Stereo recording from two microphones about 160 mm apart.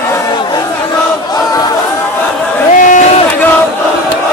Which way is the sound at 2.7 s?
55° left (ahead or behind).